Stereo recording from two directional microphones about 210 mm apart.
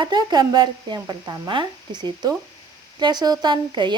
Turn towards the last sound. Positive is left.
turn(degrees=-20)  # may be behind; listen again after turning